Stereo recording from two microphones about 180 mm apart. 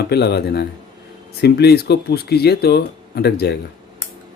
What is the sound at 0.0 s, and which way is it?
Speech, 65° left (ahead or behind).